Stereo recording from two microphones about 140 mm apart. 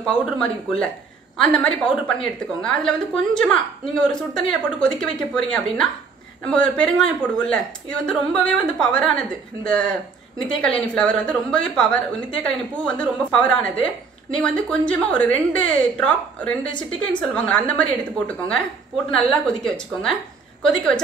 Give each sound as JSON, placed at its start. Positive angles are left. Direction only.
{"t": 0.0, "sound": "a woman's voice", "side_deg": 5}